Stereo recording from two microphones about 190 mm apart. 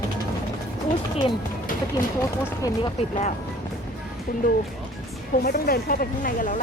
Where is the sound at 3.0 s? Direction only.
35° left (ahead or behind).